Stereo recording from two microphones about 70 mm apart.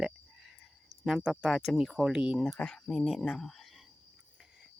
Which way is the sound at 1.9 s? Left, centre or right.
Centre.